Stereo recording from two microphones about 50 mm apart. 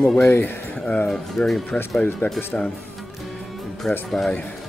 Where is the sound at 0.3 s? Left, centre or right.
Left.